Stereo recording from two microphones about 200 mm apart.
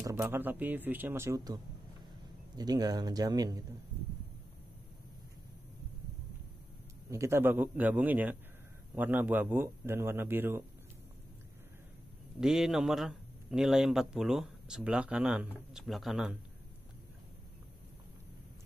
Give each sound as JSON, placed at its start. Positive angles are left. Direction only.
{"t": 0.0, "sound": "a man's voice", "side_deg": -10}
{"t": 7.1, "sound": "a man's voice", "side_deg": -15}
{"t": 12.4, "sound": "speech", "side_deg": -5}